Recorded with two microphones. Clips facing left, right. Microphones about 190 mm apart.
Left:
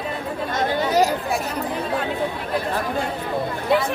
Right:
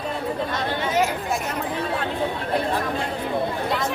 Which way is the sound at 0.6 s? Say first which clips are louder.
Left 6 dB; 40° left (ahead or behind).